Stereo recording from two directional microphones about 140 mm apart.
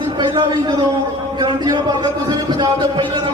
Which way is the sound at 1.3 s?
30° right (ahead or behind).